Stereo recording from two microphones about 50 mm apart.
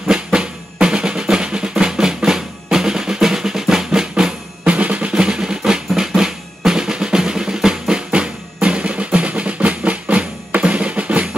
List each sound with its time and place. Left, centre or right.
0.0 s drum: centre
4.1 s drum: right